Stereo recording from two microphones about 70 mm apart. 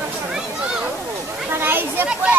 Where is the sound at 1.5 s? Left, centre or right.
Right.